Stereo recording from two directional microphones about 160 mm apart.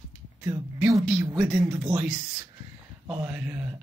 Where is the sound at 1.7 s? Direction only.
15° right (ahead or behind).